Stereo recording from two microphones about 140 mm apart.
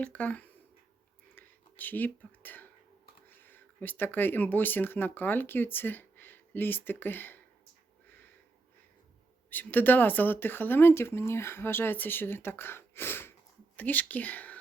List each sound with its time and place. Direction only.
0.0 s speech: 10° left (ahead or behind)
1.4 s whispering: 10° left (ahead or behind)
3.2 s speech: 15° left (ahead or behind)
9.5 s speech: 15° left (ahead or behind)